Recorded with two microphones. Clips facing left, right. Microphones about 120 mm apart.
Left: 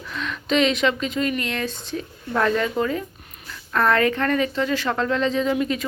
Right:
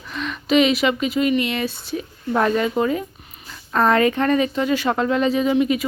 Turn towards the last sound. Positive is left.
turn(degrees=-10)  # may be behind; listen again after turning